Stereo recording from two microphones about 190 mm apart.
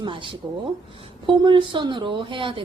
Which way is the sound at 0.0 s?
25° right (ahead or behind).